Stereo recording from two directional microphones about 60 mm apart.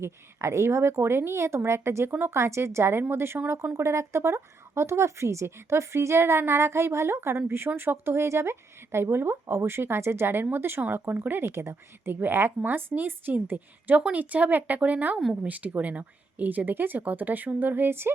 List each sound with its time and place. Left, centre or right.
0.0 s speech: right